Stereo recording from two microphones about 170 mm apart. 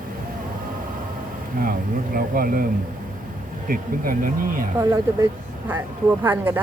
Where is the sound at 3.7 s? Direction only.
55° right (ahead or behind).